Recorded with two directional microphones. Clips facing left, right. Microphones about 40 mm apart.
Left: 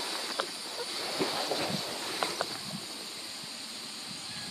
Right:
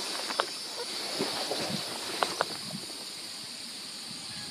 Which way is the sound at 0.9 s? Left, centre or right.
Centre.